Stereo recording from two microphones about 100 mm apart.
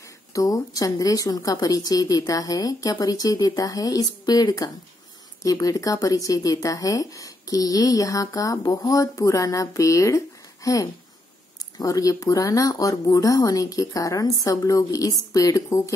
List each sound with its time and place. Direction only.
0.3 s speech: 35° left (ahead or behind)